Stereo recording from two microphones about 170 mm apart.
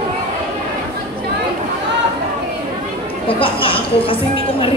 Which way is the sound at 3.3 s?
30° left (ahead or behind).